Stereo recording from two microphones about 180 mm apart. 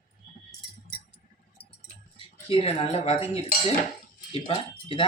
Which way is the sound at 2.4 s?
35° left (ahead or behind).